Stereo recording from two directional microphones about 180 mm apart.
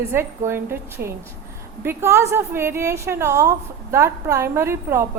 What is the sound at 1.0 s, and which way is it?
Speech, 60° right (ahead or behind).